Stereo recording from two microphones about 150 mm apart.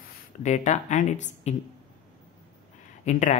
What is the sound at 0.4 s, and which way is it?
Speech, 50° left (ahead or behind).